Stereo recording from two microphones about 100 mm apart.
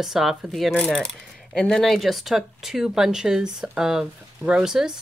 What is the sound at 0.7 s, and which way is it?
Speech, 15° left (ahead or behind).